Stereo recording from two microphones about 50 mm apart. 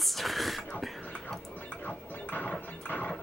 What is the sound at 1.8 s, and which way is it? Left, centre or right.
Squeal, left.